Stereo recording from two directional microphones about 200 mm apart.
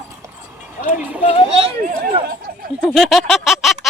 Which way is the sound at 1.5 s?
30° right (ahead or behind).